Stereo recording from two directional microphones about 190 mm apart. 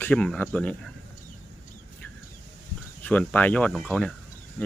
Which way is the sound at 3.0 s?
10° left (ahead or behind).